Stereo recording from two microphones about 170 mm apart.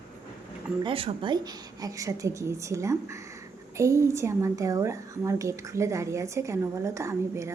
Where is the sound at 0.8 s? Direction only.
35° right (ahead or behind).